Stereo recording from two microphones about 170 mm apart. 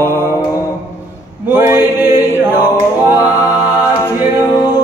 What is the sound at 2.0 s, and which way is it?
Choir, 10° right (ahead or behind).